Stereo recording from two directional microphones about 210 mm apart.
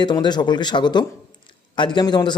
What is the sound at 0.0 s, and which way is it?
A man's voice, 20° left (ahead or behind).